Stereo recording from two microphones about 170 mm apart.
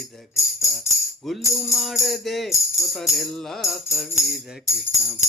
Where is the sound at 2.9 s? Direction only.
Centre (ahead or behind).